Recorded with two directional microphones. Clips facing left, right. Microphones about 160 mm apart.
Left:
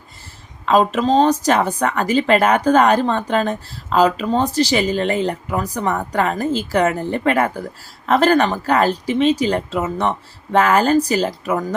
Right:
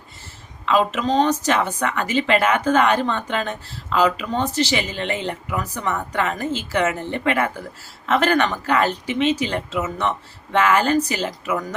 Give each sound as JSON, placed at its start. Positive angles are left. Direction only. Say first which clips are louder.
{"t": 0.6, "sound": "a woman's voice", "louder": "left 4 dB", "side_deg": 40}